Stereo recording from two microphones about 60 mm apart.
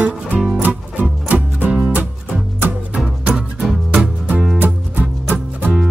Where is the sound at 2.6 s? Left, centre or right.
Right.